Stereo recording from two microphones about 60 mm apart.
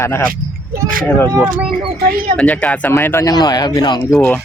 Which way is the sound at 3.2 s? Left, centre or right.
Left.